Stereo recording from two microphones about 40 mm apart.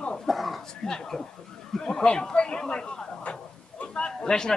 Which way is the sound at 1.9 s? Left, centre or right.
Centre.